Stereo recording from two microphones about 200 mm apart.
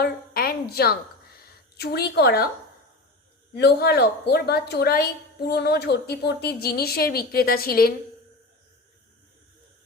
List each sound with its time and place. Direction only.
0.0 s a sound: 50° left (ahead or behind)
1.7 s a woman's voice: 55° left (ahead or behind)
3.5 s a woman's voice: 55° left (ahead or behind)